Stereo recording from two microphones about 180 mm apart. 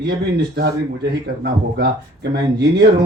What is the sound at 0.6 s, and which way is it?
Speech, 65° right (ahead or behind).